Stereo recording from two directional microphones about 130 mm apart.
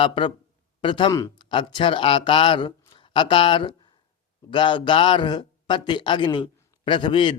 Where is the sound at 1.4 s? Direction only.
40° left (ahead or behind).